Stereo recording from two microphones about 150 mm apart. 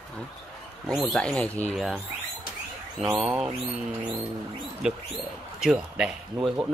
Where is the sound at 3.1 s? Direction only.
5° right (ahead or behind).